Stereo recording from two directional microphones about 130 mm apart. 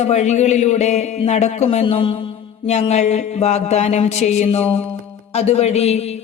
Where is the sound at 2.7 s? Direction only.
60° left (ahead or behind).